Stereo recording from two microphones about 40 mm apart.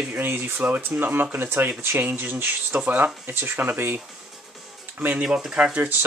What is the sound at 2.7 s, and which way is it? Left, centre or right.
Speech, right.